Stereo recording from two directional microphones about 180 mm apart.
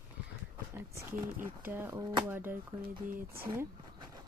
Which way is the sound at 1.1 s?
10° right (ahead or behind).